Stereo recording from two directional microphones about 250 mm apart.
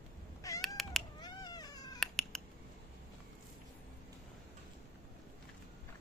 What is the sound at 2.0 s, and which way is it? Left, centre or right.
Cat, centre.